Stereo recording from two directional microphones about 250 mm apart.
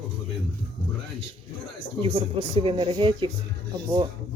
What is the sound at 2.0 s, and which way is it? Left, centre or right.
Speech, right.